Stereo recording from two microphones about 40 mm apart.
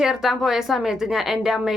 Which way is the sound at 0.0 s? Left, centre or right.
Centre.